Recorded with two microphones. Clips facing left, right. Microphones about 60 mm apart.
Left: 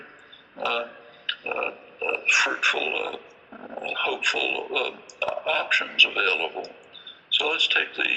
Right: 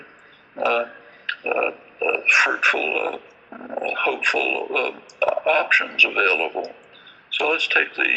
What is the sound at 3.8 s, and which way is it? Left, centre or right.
A man's voice, right.